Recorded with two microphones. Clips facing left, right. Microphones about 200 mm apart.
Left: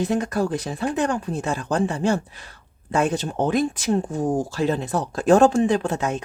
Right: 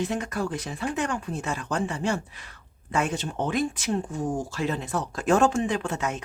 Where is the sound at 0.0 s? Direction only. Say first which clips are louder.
Left 6 dB; 35° left (ahead or behind).